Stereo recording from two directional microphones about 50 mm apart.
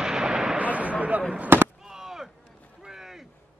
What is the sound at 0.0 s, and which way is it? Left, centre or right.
Artillery fire, centre.